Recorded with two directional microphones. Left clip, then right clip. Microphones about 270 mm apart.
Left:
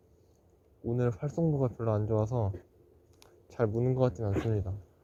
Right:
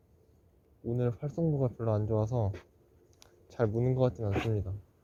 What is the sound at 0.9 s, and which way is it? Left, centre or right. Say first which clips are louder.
Speech: left 2 dB; centre.